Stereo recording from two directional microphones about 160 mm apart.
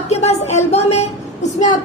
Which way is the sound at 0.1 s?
45° left (ahead or behind).